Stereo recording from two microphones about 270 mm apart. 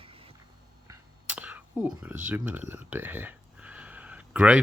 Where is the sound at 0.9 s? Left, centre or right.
Centre.